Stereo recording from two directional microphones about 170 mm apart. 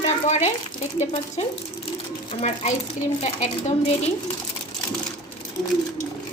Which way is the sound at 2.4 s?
40° left (ahead or behind).